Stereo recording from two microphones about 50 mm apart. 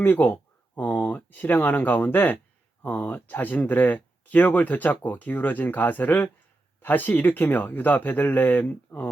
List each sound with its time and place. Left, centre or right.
0.0 s speech: left
0.8 s speech: left